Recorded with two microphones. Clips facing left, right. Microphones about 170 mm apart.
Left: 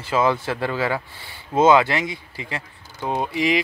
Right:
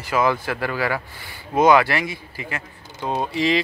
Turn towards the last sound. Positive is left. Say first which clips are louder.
# even
turn(degrees=15)  # may be behind; listen again after turning